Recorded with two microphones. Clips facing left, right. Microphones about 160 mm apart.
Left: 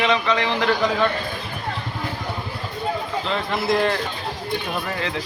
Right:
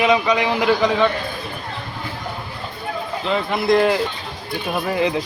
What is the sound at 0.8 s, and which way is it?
Speech, centre (ahead or behind).